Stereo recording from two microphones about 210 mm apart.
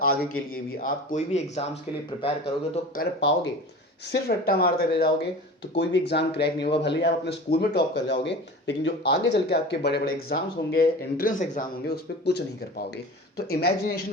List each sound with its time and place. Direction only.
0.3 s speech: 40° left (ahead or behind); by 2.4 s 25° left (ahead or behind)
2.7 s speech: 45° left (ahead or behind)